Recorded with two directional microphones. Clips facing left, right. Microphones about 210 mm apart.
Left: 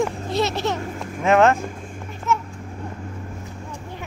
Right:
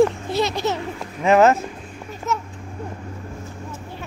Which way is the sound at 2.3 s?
40° right (ahead or behind).